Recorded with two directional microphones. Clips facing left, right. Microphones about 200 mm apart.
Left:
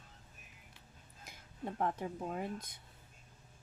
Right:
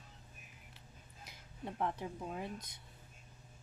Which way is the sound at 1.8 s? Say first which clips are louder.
Left 2 dB; 45° left (ahead or behind).